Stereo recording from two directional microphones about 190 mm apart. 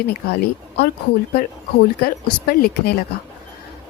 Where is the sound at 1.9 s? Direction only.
55° left (ahead or behind).